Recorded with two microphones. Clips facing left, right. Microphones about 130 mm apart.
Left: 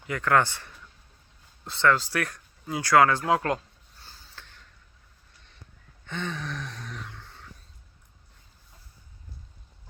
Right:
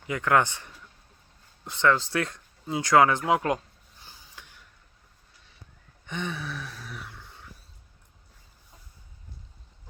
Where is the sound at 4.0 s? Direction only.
15° right (ahead or behind).